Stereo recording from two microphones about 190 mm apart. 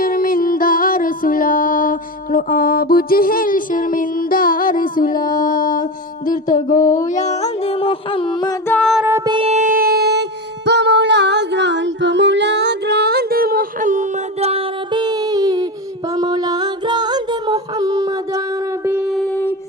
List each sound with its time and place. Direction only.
0.0 s music: 50° left (ahead or behind)
6.2 s a sound: 45° left (ahead or behind); by 8.5 s 25° left (ahead or behind)
8.6 s music: 10° left (ahead or behind)
8.9 s music: 5° right (ahead or behind)
9.1 s music: 20° right (ahead or behind)
18.9 s a sound: 5° right (ahead or behind)